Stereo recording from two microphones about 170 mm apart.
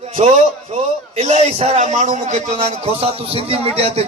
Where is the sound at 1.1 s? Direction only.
40° right (ahead or behind).